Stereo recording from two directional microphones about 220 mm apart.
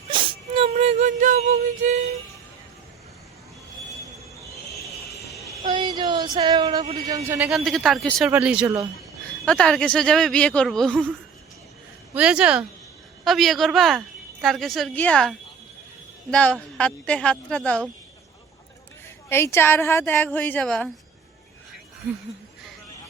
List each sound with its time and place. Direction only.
0.1 s a sound: 25° right (ahead or behind)
5.7 s a sound: 20° right (ahead or behind)
7.3 s speech: 5° right (ahead or behind)
9.5 s speech: 5° left (ahead or behind)
12.1 s speech: 5° right (ahead or behind)
19.0 s a woman's voice: 10° left (ahead or behind)